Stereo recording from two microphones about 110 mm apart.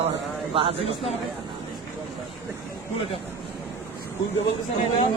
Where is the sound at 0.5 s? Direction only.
55° right (ahead or behind).